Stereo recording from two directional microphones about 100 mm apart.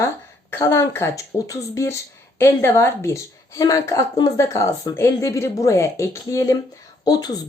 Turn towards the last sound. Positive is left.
turn(degrees=40)  # may be behind; listen again after turning